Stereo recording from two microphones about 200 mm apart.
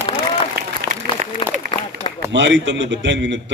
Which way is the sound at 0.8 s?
55° right (ahead or behind).